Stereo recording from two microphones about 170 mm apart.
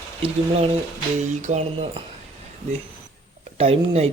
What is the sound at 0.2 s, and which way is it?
Speech, 35° right (ahead or behind).